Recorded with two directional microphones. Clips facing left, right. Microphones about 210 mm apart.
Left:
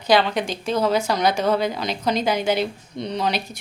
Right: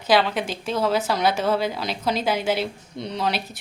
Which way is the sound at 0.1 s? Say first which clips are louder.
Left 1 dB; 5° right (ahead or behind).